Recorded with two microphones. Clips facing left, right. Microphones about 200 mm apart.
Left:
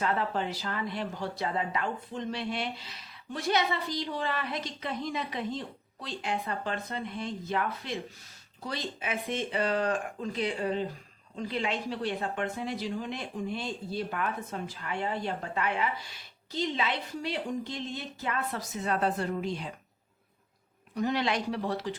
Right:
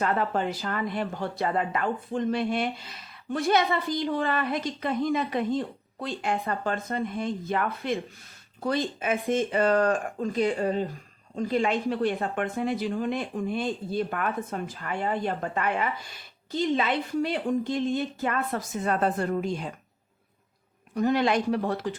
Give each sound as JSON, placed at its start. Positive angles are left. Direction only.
{"t": 0.0, "sound": "speech", "side_deg": -50}
{"t": 20.9, "sound": "speech", "side_deg": -50}